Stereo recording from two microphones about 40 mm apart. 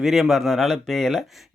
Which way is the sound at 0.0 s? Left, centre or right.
Centre.